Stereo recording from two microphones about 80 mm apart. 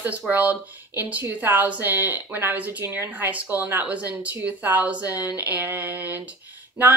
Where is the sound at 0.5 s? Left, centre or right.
Right.